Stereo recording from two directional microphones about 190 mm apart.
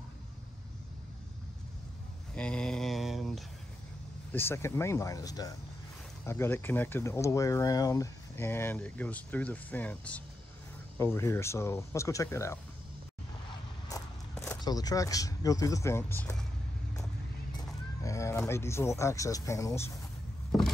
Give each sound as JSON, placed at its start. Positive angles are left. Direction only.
{"t": 2.3, "sound": "mantra", "side_deg": 5}
{"t": 4.3, "sound": "speech", "side_deg": 10}
{"t": 13.8, "sound": "speech", "side_deg": 15}
{"t": 18.0, "sound": "a sound", "side_deg": 15}
{"t": 18.5, "sound": "speech", "side_deg": 15}